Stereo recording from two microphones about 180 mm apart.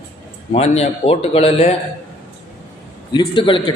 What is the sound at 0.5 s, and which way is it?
A man's voice, 35° left (ahead or behind).